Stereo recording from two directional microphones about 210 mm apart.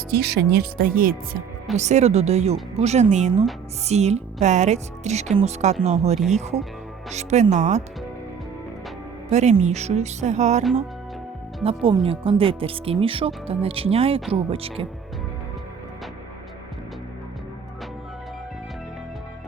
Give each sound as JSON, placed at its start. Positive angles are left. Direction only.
{"t": 0.1, "sound": "speech", "side_deg": -50}
{"t": 1.7, "sound": "speech", "side_deg": -35}
{"t": 9.3, "sound": "speech", "side_deg": -35}
{"t": 11.6, "sound": "speech", "side_deg": -25}